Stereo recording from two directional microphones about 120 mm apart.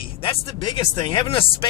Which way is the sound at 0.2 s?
45° left (ahead or behind).